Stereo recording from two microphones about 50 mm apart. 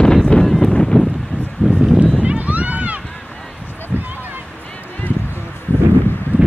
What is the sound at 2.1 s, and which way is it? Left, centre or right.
Run, right.